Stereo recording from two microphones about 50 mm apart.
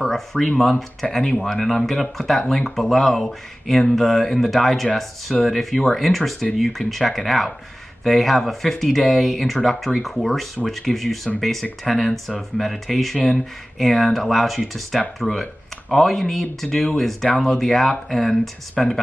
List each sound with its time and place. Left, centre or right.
0.0 s speech: centre